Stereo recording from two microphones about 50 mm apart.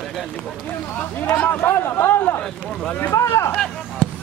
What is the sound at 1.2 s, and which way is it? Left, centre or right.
Speech, left.